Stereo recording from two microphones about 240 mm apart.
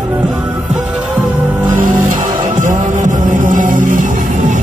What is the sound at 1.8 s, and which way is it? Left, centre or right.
Music, right.